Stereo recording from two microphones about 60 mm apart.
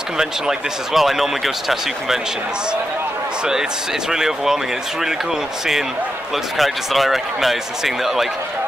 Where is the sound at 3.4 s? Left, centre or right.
Centre.